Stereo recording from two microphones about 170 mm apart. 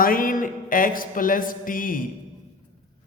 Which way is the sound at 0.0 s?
55° left (ahead or behind).